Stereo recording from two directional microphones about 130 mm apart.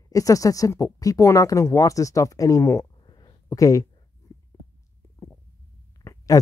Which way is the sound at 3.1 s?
35° left (ahead or behind).